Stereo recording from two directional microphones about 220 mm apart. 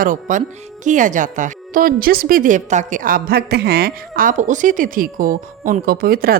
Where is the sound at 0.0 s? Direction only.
35° right (ahead or behind).